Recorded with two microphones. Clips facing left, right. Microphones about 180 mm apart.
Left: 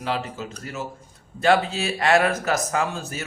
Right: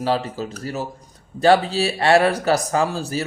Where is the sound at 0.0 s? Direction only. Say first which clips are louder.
Right 6 dB; 35° right (ahead or behind).